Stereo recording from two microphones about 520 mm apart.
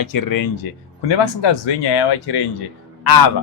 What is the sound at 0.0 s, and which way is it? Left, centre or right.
Speech, left.